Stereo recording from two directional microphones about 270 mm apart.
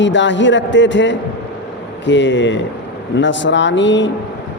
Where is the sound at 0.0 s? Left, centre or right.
Left.